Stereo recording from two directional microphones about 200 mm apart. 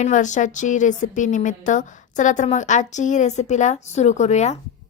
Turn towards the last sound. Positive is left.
turn(degrees=35)  # may be behind; listen again after turning